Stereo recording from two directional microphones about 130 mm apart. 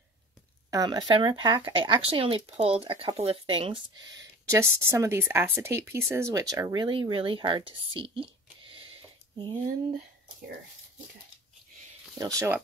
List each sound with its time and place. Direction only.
0.7 s speech: 30° right (ahead or behind)
4.5 s speech: 20° right (ahead or behind); by 8.3 s 45° right (ahead or behind)
12.2 s speech: 25° right (ahead or behind)